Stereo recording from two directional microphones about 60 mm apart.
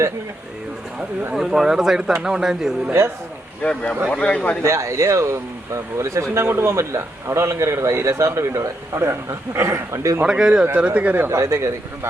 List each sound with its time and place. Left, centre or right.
1.3 s speech: centre
3.6 s a man's voice: centre
4.6 s speech: right
6.3 s a man's voice: right
10.2 s speech: centre
10.8 s speech: right
11.3 s speech: right